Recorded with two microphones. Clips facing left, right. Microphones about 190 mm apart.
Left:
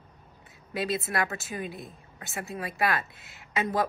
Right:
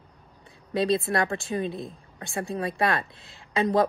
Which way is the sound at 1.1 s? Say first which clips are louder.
Right 5 dB; 25° right (ahead or behind).